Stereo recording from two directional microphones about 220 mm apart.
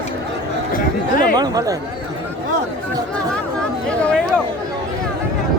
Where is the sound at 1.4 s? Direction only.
15° right (ahead or behind).